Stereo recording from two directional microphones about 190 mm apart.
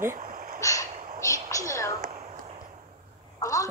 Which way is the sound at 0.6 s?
15° left (ahead or behind).